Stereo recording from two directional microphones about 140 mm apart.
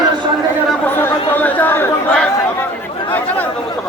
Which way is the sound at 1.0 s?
15° left (ahead or behind).